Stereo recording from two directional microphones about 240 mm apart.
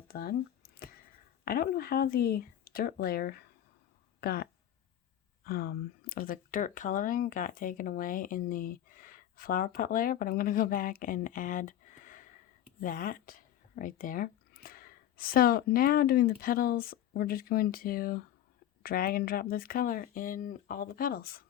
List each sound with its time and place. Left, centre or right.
0.1 s a sound: left
1.5 s speech: left
5.5 s speech: left